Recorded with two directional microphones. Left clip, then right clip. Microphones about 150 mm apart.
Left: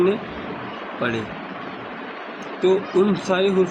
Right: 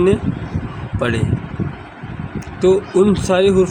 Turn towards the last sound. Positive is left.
turn(degrees=-65)  # may be behind; listen again after turning